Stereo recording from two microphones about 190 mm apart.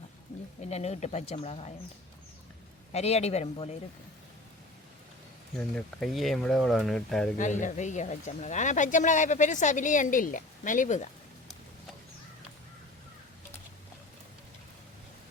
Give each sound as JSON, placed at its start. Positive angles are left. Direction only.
{"t": 0.6, "sound": "speech", "side_deg": 35}
{"t": 2.9, "sound": "speech", "side_deg": 35}
{"t": 5.5, "sound": "speech", "side_deg": 5}
{"t": 7.3, "sound": "speech", "side_deg": 40}